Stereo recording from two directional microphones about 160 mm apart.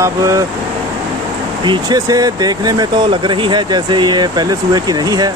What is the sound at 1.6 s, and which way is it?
Speech, 25° right (ahead or behind).